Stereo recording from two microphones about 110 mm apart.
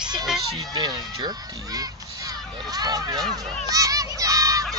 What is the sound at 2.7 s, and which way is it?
Speech, 35° right (ahead or behind).